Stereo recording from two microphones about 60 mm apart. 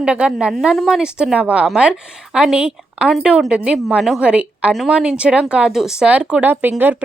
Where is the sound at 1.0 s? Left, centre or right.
Centre.